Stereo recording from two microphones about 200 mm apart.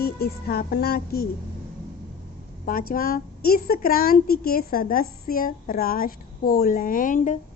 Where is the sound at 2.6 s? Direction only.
45° left (ahead or behind).